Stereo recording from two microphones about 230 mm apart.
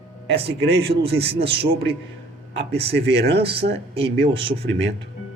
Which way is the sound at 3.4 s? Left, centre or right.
Right.